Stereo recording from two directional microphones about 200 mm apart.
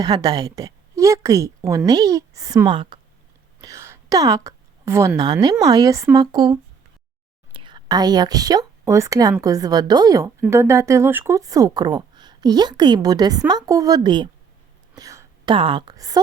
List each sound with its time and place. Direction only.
0.0 s a woman's voice: 20° right (ahead or behind)
14.9 s whispering: 15° right (ahead or behind)
15.5 s speech: 25° right (ahead or behind)